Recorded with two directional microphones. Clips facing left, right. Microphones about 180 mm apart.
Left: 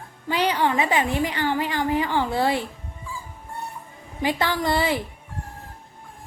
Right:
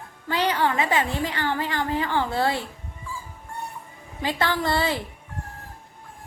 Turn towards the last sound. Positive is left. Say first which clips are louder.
# left 2 dB
turn(degrees=15)  # may be behind; listen again after turning